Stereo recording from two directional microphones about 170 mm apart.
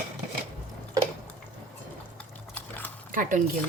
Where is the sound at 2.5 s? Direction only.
10° left (ahead or behind).